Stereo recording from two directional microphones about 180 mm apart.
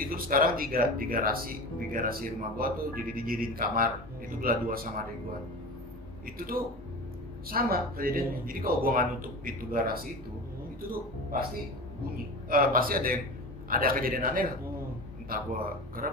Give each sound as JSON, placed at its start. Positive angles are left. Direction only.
{"t": 0.0, "sound": "speech", "side_deg": -55}
{"t": 6.2, "sound": "speech", "side_deg": -55}
{"t": 12.4, "sound": "speech", "side_deg": -55}